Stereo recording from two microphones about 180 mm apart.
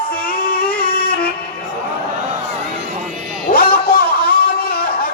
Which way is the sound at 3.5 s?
55° left (ahead or behind).